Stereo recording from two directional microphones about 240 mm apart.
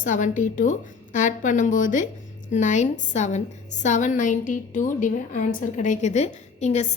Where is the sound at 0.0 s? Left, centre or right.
Left.